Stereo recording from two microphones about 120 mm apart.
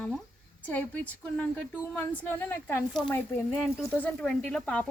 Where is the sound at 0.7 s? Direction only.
15° left (ahead or behind).